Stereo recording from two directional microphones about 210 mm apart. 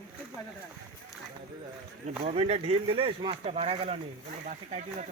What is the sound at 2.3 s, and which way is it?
Speech, 25° right (ahead or behind).